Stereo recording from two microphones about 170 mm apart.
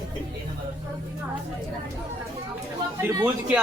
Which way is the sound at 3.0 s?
15° right (ahead or behind).